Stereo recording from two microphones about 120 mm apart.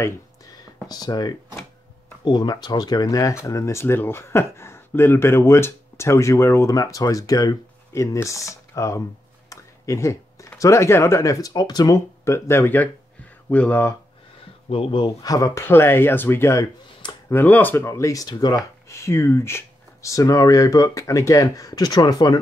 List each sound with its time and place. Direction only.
0.8 s speech: 35° left (ahead or behind)
9.5 s a sound: 25° left (ahead or behind)
10.6 s speech: 25° left (ahead or behind)
14.7 s speech: 50° left (ahead or behind)
18.9 s speech: 25° left (ahead or behind)